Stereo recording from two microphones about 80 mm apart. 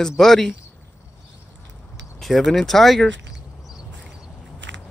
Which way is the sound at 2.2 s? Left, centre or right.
Centre.